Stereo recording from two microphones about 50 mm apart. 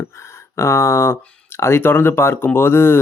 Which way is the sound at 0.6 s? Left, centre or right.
Left.